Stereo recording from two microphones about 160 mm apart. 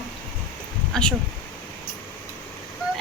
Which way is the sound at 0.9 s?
5° left (ahead or behind).